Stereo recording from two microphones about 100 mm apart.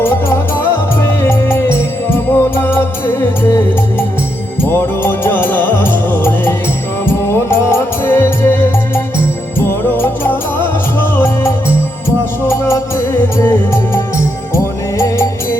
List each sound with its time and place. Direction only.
1.0 s music: 25° left (ahead or behind)
9.6 s music: 25° left (ahead or behind)
12.4 s music: 25° left (ahead or behind)